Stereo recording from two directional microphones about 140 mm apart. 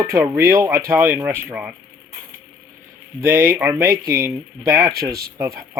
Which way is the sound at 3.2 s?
15° right (ahead or behind).